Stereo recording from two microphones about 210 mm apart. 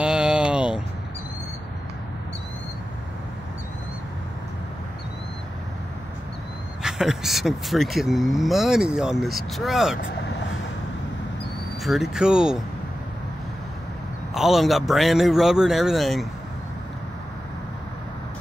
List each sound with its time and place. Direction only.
0.0 s a sound: 5° right (ahead or behind)
6.8 s speech: centre (ahead or behind)
11.8 s speech: centre (ahead or behind)
14.3 s speech: centre (ahead or behind)